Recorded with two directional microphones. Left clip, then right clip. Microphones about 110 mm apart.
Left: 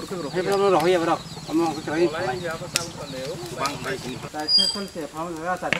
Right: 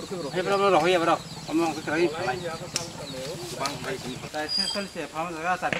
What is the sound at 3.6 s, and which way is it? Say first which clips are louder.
Speech: left 4 dB; 20° left (ahead or behind).